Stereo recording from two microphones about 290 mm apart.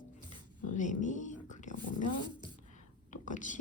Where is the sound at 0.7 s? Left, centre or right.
Left.